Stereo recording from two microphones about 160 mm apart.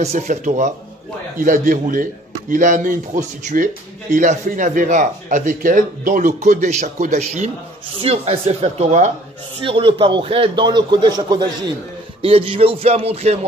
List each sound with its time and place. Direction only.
0.0 s a man's voice: 50° right (ahead or behind)
9.6 s a man's voice: 35° right (ahead or behind)